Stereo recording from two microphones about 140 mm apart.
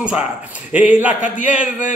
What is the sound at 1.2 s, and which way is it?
Speech, 65° left (ahead or behind).